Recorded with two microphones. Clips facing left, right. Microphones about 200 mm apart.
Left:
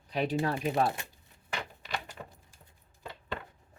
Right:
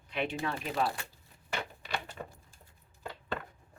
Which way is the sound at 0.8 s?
20° left (ahead or behind).